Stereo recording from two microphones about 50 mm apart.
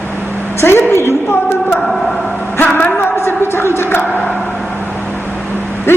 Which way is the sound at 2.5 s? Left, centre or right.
Left.